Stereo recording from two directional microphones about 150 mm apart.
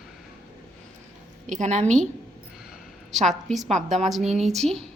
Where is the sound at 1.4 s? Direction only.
55° right (ahead or behind).